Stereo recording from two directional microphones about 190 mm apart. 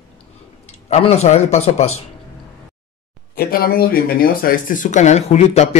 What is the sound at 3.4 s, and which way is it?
Speech, 50° left (ahead or behind).